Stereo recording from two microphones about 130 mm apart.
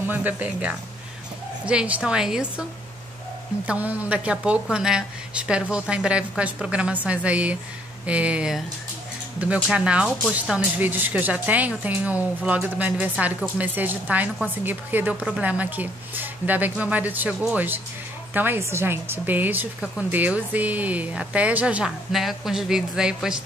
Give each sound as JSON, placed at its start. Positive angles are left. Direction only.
{"t": 0.1, "sound": "a woman's voice", "side_deg": -15}
{"t": 3.6, "sound": "a woman's voice", "side_deg": -10}